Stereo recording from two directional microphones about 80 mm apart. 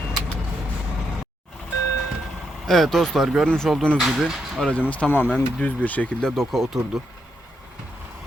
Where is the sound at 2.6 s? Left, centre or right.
Centre.